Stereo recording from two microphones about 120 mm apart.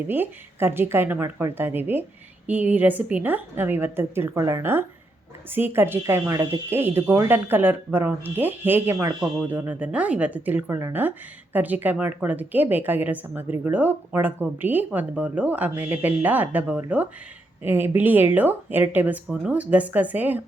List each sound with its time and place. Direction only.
0.1 s speech: 20° right (ahead or behind)